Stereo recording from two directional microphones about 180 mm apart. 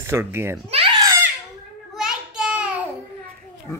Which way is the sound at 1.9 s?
5° right (ahead or behind).